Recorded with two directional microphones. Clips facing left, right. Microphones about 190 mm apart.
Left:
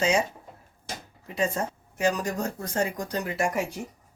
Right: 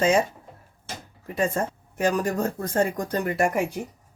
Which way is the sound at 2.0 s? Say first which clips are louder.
Right 3 dB; 55° right (ahead or behind).